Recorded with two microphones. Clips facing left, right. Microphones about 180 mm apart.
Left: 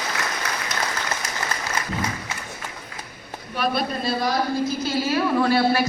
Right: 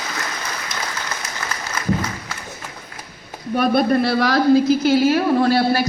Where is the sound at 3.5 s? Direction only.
50° right (ahead or behind); by 5.1 s 90° right.